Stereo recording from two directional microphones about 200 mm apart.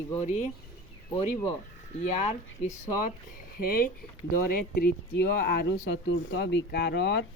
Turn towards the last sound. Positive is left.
turn(degrees=60)  # may be behind; listen again after turning